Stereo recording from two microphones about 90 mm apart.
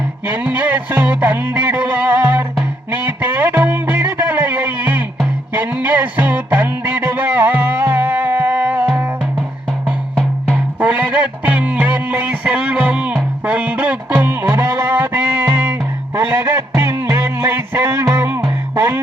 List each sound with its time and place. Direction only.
0.3 s music: 20° right (ahead or behind)
9.8 s music: 10° left (ahead or behind)
10.8 s music: 15° right (ahead or behind)